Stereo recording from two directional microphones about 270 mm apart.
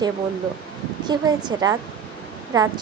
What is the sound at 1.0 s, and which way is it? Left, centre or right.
Speech, centre.